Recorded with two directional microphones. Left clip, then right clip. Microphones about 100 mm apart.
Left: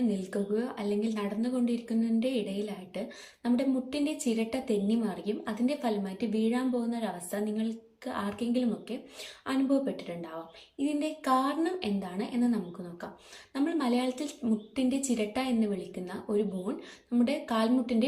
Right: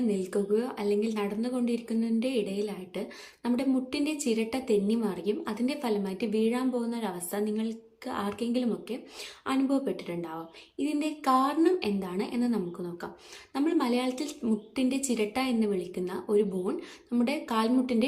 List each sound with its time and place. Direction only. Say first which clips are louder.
0.1 s a woman's voice: right 4 dB; 30° right (ahead or behind)